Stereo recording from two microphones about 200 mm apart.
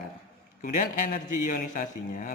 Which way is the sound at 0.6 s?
45° left (ahead or behind).